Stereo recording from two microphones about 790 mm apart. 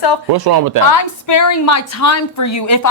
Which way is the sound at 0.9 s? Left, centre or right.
Left.